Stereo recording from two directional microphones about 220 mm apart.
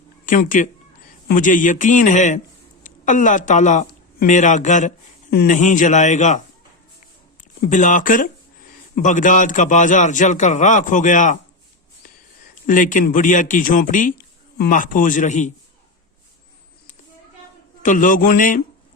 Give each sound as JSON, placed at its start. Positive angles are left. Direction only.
{"t": 0.3, "sound": "a man's voice", "side_deg": 35}
{"t": 7.7, "sound": "a man's voice", "side_deg": 35}
{"t": 12.6, "sound": "a man's voice", "side_deg": 35}
{"t": 17.8, "sound": "a man's voice", "side_deg": 35}